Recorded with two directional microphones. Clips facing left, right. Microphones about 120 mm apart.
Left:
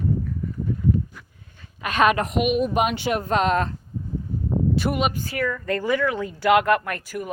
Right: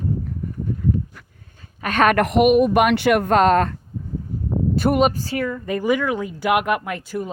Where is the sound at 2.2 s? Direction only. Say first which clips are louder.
Right 7 dB; 60° right (ahead or behind).